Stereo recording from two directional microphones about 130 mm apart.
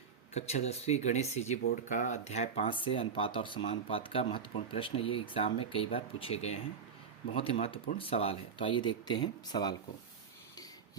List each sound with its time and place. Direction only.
0.3 s speech: 55° left (ahead or behind)
2.7 s speech: 40° left (ahead or behind)
7.9 s speech: 50° left (ahead or behind)